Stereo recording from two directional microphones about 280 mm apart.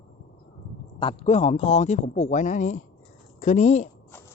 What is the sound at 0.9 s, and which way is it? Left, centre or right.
A man's voice, centre.